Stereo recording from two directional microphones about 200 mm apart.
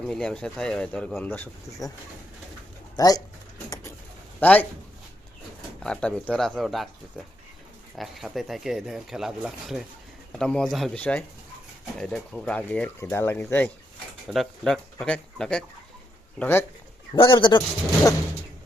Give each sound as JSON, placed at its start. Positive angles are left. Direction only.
{"t": 0.0, "sound": "speech", "side_deg": 5}
{"t": 2.9, "sound": "speech", "side_deg": 20}
{"t": 4.4, "sound": "a man's voice", "side_deg": 10}
{"t": 5.8, "sound": "speech", "side_deg": 5}
{"t": 7.9, "sound": "speech", "side_deg": 0}
{"t": 17.2, "sound": "speech", "side_deg": 25}